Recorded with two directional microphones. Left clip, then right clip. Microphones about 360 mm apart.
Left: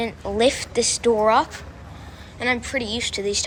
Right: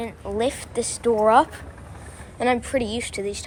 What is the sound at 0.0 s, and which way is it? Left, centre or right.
A woman's voice, centre.